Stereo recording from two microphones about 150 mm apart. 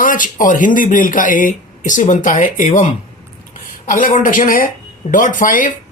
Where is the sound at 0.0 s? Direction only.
65° left (ahead or behind).